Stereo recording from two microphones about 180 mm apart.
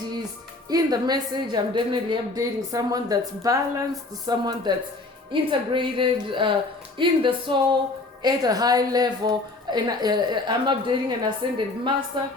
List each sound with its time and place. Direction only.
0.7 s a woman's voice: 20° right (ahead or behind)